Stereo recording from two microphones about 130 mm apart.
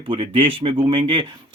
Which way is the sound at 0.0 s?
40° right (ahead or behind).